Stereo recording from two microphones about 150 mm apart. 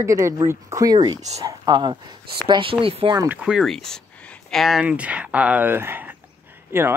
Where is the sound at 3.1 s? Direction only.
20° right (ahead or behind).